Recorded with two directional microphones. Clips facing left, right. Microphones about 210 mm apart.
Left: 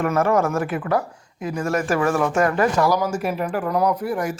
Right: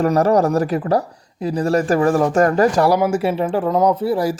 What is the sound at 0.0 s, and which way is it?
Speech, 35° right (ahead or behind).